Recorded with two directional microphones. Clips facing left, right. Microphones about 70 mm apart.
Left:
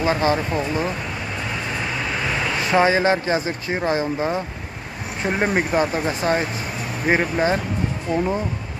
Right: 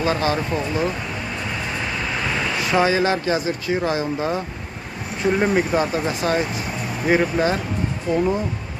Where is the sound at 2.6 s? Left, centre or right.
Left.